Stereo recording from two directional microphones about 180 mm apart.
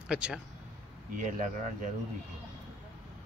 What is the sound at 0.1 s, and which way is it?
Speech, 5° right (ahead or behind).